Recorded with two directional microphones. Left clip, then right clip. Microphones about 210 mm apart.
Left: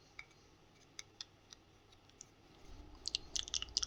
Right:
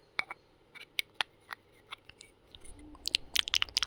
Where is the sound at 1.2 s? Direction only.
50° right (ahead or behind).